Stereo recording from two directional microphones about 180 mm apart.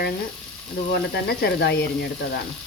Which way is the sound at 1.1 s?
70° left (ahead or behind).